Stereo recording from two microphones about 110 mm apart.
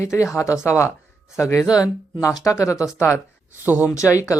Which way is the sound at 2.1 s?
30° left (ahead or behind).